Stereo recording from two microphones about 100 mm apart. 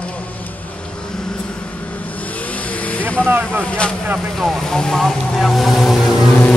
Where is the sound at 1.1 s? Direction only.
5° left (ahead or behind).